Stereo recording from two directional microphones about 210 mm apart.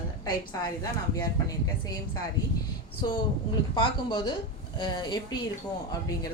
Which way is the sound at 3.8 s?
20° left (ahead or behind).